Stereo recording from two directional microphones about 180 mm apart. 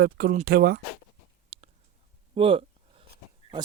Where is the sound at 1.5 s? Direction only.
35° right (ahead or behind).